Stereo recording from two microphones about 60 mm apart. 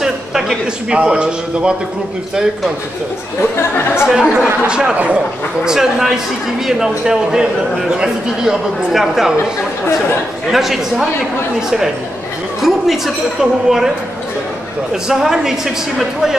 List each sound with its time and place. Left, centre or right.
0.0 s a sound: centre
0.9 s speech: centre
3.5 s speech: left
4.1 s speech: centre
4.9 s speech: right
5.7 s speech: centre
10.5 s speech: centre
12.6 s speech: centre
15.0 s speech: centre